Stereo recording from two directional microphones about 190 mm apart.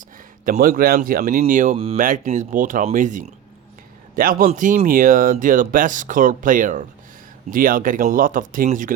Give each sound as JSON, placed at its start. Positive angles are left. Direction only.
{"t": 0.4, "sound": "speech", "side_deg": -45}
{"t": 1.7, "sound": "speech", "side_deg": -30}
{"t": 2.0, "sound": "speech", "side_deg": -45}